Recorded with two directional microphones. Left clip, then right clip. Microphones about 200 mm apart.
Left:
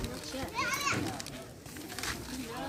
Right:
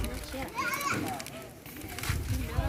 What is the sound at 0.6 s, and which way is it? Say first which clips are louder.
Children playing: right 1 dB; 65° right (ahead or behind).